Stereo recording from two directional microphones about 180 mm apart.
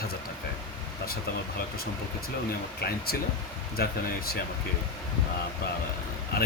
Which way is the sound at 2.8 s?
60° left (ahead or behind).